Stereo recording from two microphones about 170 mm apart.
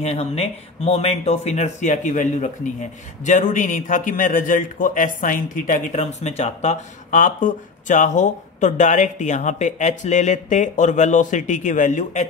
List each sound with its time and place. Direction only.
0.0 s a man's voice: 35° left (ahead or behind)